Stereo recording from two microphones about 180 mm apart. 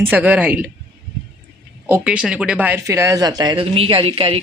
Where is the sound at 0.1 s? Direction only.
10° right (ahead or behind).